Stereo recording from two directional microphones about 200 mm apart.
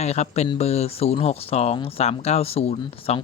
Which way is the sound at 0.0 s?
35° left (ahead or behind).